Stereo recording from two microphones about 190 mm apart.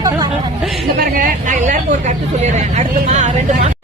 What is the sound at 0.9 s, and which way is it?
Speech, 50° right (ahead or behind).